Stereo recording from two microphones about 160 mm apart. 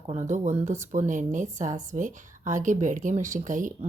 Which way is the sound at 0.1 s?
50° right (ahead or behind).